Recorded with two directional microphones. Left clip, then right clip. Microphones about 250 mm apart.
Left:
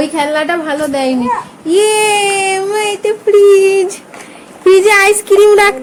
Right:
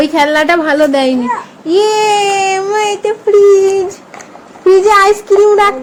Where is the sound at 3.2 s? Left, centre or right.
Centre.